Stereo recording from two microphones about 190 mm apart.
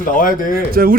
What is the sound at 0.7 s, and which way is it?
Speech, 50° right (ahead or behind).